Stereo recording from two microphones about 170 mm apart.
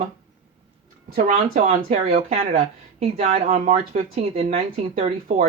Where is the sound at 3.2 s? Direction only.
50° right (ahead or behind).